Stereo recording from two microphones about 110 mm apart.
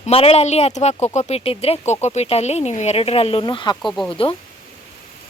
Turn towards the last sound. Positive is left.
turn(degrees=55)  # may be behind; listen again after turning